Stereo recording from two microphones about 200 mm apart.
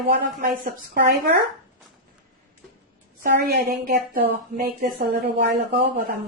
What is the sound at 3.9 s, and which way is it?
Speech, 45° right (ahead or behind).